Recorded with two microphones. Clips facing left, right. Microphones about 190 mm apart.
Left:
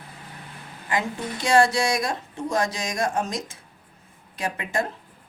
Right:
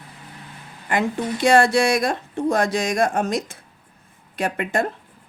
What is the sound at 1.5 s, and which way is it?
Speech, 55° right (ahead or behind).